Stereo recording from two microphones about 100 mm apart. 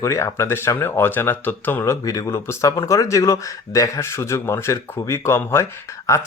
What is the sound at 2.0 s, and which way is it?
Speech, 35° left (ahead or behind).